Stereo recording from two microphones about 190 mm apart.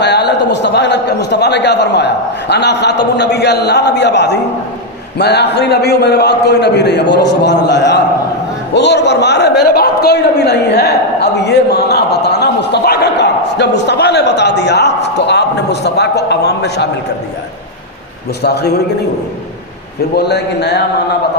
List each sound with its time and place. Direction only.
0.0 s a man's voice: 60° left (ahead or behind)
18.4 s a man's voice: 60° left (ahead or behind)
20.1 s a man's voice: 60° left (ahead or behind)